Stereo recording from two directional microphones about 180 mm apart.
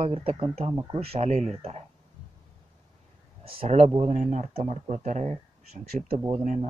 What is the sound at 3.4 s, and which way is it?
Speech, 30° right (ahead or behind).